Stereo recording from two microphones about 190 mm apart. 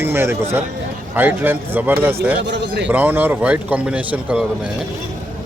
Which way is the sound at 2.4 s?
70° right (ahead or behind).